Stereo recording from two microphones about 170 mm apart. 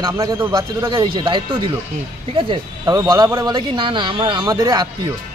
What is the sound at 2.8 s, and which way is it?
Speech, 20° right (ahead or behind).